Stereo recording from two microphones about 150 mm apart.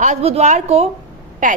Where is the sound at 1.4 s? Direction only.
60° right (ahead or behind).